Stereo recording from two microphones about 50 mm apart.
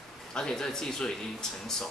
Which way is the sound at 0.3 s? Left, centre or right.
Centre.